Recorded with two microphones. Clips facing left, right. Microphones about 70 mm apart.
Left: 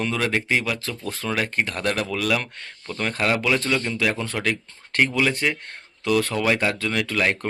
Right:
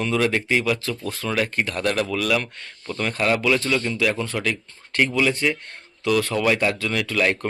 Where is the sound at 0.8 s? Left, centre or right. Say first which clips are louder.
Right 2 dB; left.